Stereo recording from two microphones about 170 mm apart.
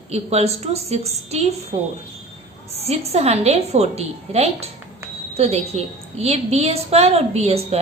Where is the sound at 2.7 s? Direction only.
35° right (ahead or behind).